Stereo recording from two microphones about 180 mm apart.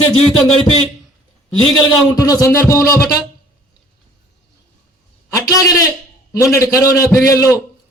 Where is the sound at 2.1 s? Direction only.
20° left (ahead or behind).